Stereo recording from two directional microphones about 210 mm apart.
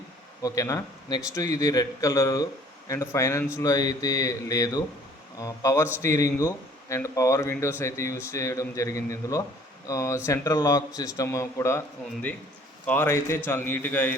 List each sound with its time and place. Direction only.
0.4 s speech: 15° left (ahead or behind)
12.8 s speech: 10° left (ahead or behind)